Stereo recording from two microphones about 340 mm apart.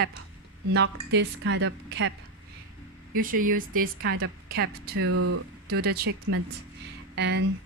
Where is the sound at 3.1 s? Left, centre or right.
Right.